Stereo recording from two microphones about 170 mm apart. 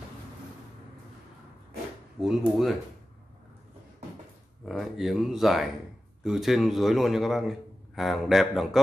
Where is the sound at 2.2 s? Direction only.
Centre (ahead or behind).